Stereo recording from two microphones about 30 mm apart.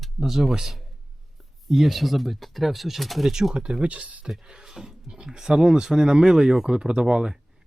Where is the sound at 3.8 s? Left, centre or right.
Right.